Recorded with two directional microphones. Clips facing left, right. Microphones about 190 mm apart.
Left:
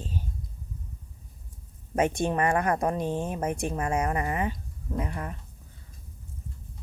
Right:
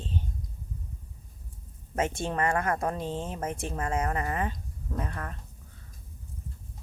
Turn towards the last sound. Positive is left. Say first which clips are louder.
# left 3 dB
turn(degrees=15)  # may be behind; listen again after turning